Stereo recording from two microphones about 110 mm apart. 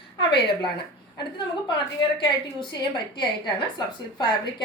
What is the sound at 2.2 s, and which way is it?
Speech, 45° left (ahead or behind).